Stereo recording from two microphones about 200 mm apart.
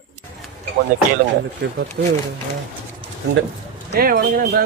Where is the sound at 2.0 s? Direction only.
50° right (ahead or behind).